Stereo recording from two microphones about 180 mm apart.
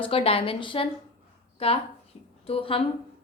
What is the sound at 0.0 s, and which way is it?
A woman's voice, 30° left (ahead or behind).